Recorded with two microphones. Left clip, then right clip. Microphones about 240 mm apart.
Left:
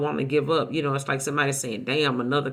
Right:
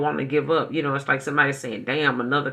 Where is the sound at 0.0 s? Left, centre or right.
Left.